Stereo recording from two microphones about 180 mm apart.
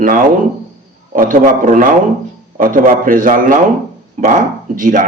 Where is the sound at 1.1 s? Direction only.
50° right (ahead or behind).